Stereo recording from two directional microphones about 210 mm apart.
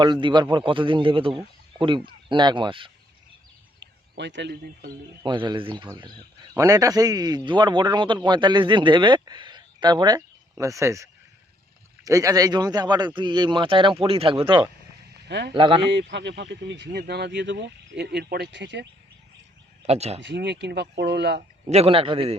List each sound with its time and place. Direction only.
0.0 s a man's voice: 20° right (ahead or behind)
3.8 s a man's voice: 60° right (ahead or behind)
5.2 s a man's voice: 20° right (ahead or behind)
15.3 s speech: 55° right (ahead or behind)
15.5 s a man's voice: 25° right (ahead or behind)
15.9 s speech: 55° right (ahead or behind)
19.8 s speech: 30° right (ahead or behind)
20.2 s speech: 55° right (ahead or behind)
21.7 s a man's voice: 30° right (ahead or behind)